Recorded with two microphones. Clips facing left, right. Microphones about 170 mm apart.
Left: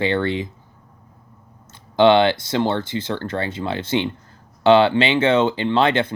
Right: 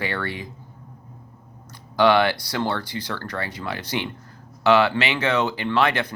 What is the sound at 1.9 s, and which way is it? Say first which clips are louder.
Speech: left 4 dB; 25° left (ahead or behind).